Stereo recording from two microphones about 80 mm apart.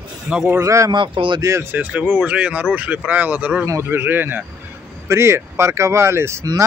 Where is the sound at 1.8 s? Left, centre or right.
Centre; by 6.4 s right.